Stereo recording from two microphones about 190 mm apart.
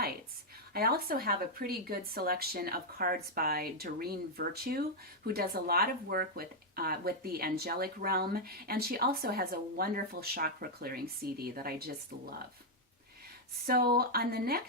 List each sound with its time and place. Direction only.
0.7 s speech: 55° right (ahead or behind)
13.7 s speech: 55° right (ahead or behind)